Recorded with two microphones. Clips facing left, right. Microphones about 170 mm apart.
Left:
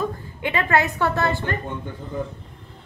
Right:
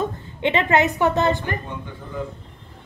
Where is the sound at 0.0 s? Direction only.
25° right (ahead or behind).